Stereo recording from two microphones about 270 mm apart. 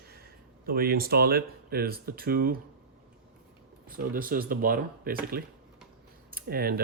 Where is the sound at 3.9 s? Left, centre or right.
Right.